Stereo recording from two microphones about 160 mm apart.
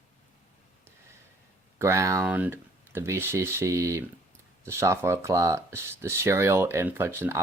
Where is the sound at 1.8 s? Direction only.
20° right (ahead or behind).